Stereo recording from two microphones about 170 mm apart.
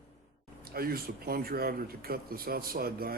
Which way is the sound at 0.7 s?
60° right (ahead or behind).